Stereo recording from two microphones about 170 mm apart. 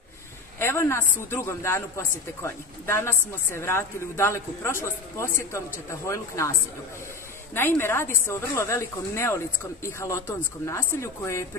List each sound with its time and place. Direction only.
0.6 s a woman's voice: 15° left (ahead or behind)
7.5 s a man's voice: 15° left (ahead or behind)